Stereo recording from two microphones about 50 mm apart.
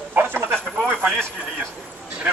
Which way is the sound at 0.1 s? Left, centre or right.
Right.